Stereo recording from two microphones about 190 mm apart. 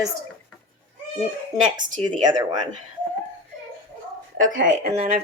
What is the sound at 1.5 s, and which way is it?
Speech, 20° right (ahead or behind).